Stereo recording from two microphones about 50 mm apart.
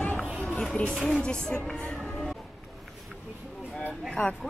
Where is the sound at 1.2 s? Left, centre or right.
Centre.